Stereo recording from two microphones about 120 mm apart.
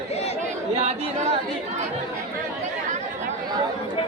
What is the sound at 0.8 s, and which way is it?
Speech, 65° right (ahead or behind).